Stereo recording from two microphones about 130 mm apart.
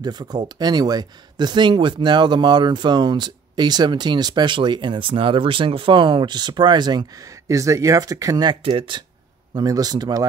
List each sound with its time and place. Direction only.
0.0 s speech: 30° right (ahead or behind)
9.5 s speech: 30° right (ahead or behind)